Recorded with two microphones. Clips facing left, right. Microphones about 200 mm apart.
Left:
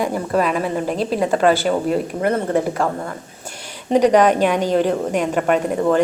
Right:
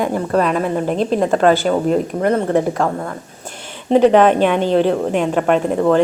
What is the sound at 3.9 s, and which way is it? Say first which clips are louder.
Speech: right 3 dB; centre (ahead or behind).